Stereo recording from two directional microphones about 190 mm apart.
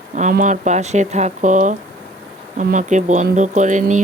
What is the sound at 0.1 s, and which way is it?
Speech, 40° right (ahead or behind).